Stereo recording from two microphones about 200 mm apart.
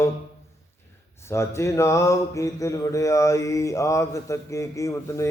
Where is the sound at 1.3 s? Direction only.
15° left (ahead or behind).